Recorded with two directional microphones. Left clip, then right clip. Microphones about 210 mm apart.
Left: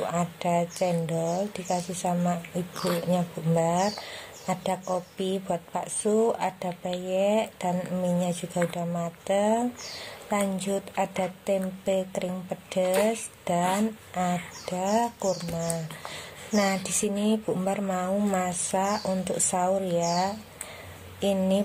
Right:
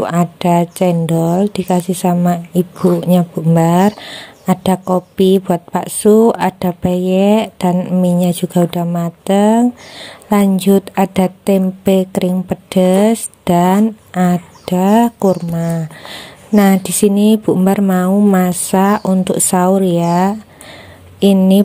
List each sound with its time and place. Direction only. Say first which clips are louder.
0.0 s speech: right 12 dB; 40° right (ahead or behind)